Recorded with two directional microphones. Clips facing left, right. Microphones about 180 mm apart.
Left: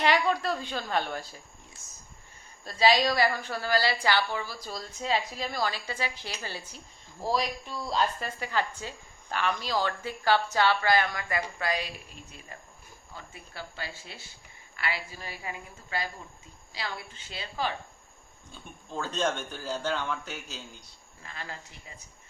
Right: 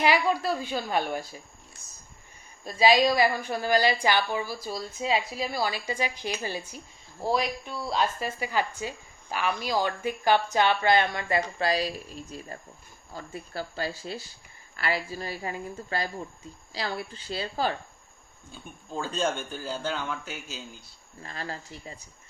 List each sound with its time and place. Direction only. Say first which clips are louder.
0.0 s a woman's voice: right 2 dB; 5° right (ahead or behind)
2.6 s a woman's voice: right 3 dB; 15° right (ahead or behind); by 17.7 s 40° right (ahead or behind)
18.9 s a man's voice: right 1 dB; 10° right (ahead or behind)
21.2 s a woman's voice: right 5 dB; 35° right (ahead or behind)